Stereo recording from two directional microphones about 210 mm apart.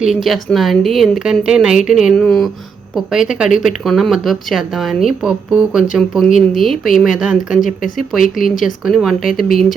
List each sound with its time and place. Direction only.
0.0 s speech: centre (ahead or behind)
8.2 s speech: 40° left (ahead or behind)
8.8 s speech: centre (ahead or behind)